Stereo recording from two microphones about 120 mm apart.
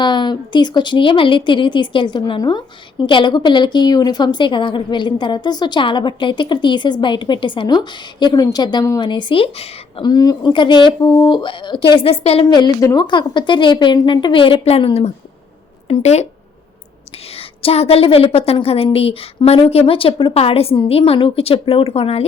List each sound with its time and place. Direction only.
0.0 s a woman's voice: 40° left (ahead or behind)
10.0 s a woman's voice: 35° left (ahead or behind); by 12.5 s 55° left (ahead or behind)
12.5 s a woman's voice: 35° left (ahead or behind); by 15.1 s 55° left (ahead or behind)
15.9 s speech: 65° left (ahead or behind)
17.3 s a woman's voice: 55° left (ahead or behind)